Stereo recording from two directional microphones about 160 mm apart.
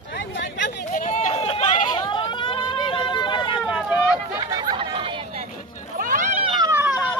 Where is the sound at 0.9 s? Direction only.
50° left (ahead or behind).